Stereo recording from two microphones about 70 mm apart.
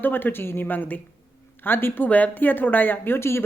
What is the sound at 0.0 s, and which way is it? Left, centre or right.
Speech, left.